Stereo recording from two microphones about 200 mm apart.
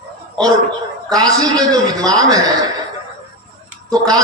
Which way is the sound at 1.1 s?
20° right (ahead or behind).